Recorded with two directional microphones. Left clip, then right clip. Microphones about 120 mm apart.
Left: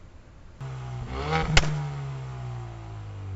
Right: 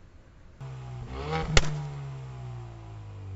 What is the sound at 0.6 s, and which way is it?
Vehicle, 35° left (ahead or behind).